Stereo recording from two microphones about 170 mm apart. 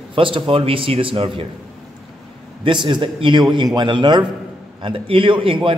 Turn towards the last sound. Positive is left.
turn(degrees=-30)  # may be behind; listen again after turning